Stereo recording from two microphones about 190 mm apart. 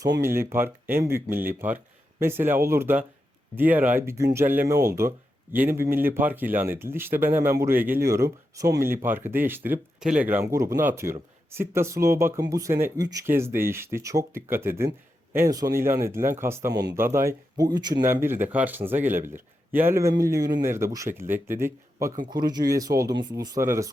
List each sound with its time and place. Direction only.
0.2 s speech: 15° right (ahead or behind)